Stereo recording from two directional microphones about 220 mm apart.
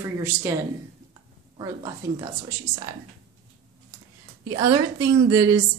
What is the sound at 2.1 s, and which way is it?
Speech, 15° right (ahead or behind).